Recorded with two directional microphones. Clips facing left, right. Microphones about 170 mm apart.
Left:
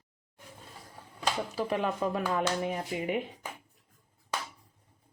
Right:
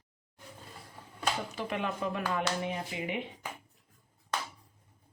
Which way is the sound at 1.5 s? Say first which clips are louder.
Left 4 dB; 35° left (ahead or behind).